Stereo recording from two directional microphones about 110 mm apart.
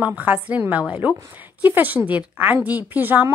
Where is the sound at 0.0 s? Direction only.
15° right (ahead or behind).